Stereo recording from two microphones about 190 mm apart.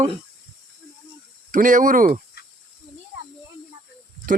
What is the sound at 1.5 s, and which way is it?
Speech, 45° right (ahead or behind).